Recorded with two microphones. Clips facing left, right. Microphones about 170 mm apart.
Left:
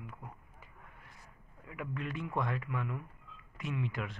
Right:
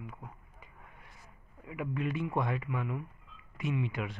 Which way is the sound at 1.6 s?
5° right (ahead or behind).